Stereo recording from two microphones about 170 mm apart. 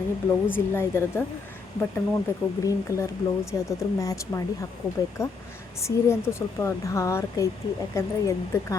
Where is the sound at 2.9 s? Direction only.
15° left (ahead or behind).